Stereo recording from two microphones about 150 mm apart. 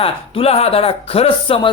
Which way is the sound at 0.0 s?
40° left (ahead or behind).